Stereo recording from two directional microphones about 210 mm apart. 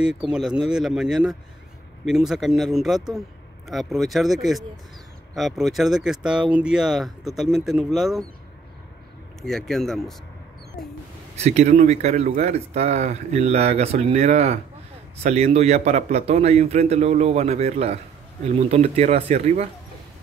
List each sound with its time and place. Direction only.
0.3 s speech: 5° right (ahead or behind)
9.4 s speech: centre (ahead or behind)
11.3 s speech: 30° right (ahead or behind)